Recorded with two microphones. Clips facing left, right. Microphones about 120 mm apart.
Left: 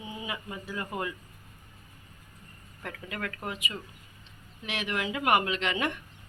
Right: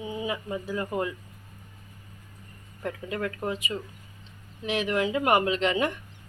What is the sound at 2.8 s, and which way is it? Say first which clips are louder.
A woman's voice: right 6 dB; 25° right (ahead or behind).